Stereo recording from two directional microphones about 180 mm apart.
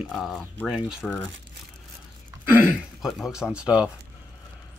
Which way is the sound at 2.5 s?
10° right (ahead or behind).